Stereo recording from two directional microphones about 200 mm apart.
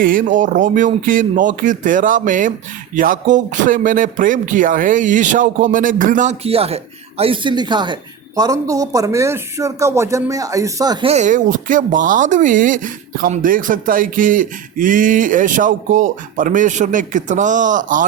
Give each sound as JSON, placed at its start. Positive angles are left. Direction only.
{"t": 0.0, "sound": "speech", "side_deg": -45}
{"t": 11.1, "sound": "speech", "side_deg": -40}